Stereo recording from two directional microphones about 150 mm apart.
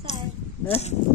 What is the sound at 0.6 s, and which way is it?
Speech, 40° left (ahead or behind).